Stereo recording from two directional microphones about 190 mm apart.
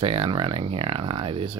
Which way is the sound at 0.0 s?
30° right (ahead or behind).